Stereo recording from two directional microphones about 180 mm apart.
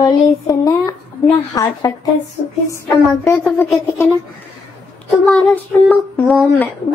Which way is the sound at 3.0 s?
10° left (ahead or behind).